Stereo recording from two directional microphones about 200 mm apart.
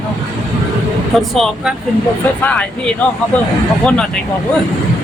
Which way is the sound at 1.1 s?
Centre (ahead or behind).